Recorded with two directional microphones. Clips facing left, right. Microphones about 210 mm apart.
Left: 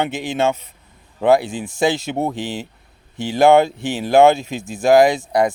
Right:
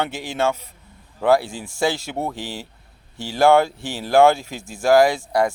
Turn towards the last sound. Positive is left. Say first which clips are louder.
# left 3 dB
turn(degrees=20)  # may be behind; listen again after turning